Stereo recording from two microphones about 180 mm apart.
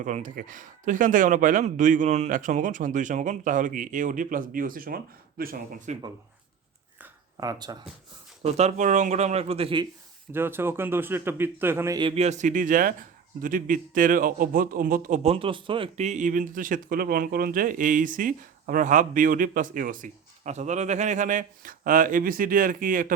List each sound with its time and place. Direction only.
0.0 s a man's voice: 45° right (ahead or behind)
7.3 s speech: 20° right (ahead or behind)
8.4 s speech: 35° right (ahead or behind)
10.3 s speech: 10° right (ahead or behind)
11.9 s a man's voice: 30° right (ahead or behind); by 15.2 s 50° right (ahead or behind)
15.2 s a man's voice: 30° right (ahead or behind); by 23.1 s 50° right (ahead or behind)